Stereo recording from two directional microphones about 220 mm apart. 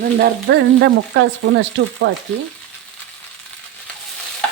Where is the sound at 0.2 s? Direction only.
50° right (ahead or behind).